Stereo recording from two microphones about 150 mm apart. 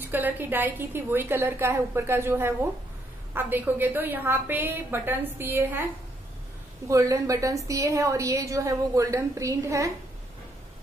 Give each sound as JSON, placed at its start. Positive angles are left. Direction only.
{"t": 0.0, "sound": "a woman's voice", "side_deg": -10}
{"t": 6.9, "sound": "a woman's voice", "side_deg": -20}